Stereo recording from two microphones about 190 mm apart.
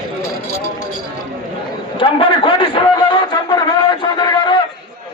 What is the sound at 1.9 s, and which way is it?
Speech, 25° left (ahead or behind).